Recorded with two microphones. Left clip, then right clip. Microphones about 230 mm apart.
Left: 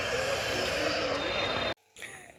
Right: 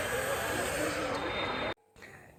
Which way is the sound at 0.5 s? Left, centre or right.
Right.